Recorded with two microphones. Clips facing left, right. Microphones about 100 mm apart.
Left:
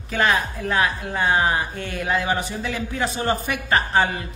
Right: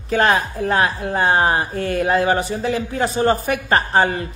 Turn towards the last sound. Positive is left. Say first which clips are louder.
# right 3 dB
turn(degrees=-35)  # may be behind; listen again after turning